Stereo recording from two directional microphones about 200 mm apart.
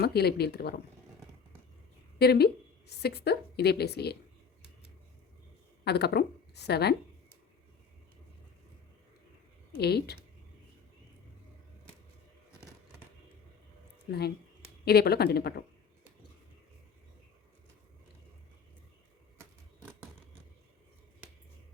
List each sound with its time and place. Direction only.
0.0 s a woman's voice: 55° left (ahead or behind)
2.1 s a woman's voice: 55° left (ahead or behind)
5.8 s a woman's voice: 55° left (ahead or behind)
9.7 s a woman's voice: 55° left (ahead or behind)
14.1 s a woman's voice: 55° left (ahead or behind)